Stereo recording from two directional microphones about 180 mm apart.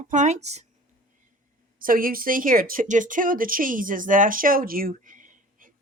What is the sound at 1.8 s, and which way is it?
Speech, 50° right (ahead or behind).